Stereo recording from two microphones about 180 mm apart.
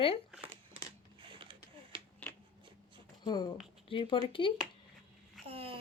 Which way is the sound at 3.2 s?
25° left (ahead or behind).